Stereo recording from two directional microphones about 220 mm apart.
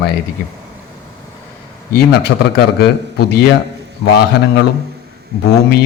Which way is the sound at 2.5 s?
50° left (ahead or behind).